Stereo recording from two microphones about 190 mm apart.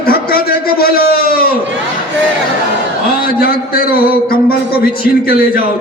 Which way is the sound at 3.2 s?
50° left (ahead or behind).